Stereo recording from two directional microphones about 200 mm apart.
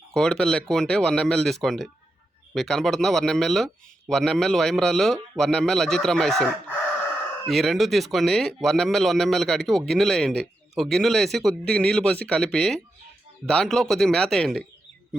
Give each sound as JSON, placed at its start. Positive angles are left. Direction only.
{"t": 0.1, "sound": "speech", "side_deg": 5}